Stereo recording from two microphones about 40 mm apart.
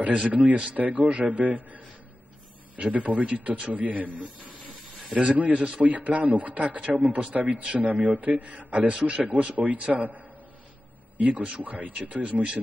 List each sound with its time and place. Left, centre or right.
0.0 s speech: right
5.1 s a man's voice: right
7.4 s a man's voice: right
7.7 s speech: right